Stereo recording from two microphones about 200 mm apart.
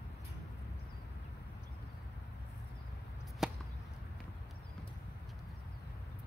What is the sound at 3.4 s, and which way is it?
Whip, centre (ahead or behind).